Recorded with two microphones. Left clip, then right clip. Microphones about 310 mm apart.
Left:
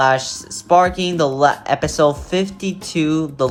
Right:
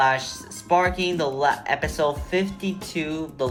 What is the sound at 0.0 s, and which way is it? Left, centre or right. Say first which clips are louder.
Speech: left 5 dB; centre.